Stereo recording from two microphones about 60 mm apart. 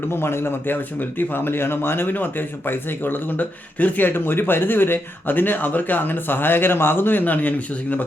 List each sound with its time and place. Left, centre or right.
0.1 s speech: left